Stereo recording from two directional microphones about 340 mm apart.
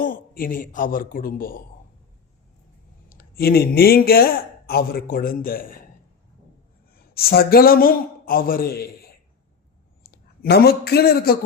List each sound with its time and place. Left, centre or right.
0.0 s speech: left
3.2 s speech: left
7.1 s speech: left
10.1 s a man's voice: left